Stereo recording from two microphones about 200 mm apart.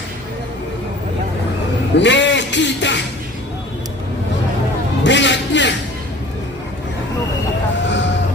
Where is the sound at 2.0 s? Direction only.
60° left (ahead or behind).